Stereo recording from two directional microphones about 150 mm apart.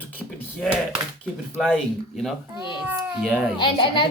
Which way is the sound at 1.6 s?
Centre (ahead or behind).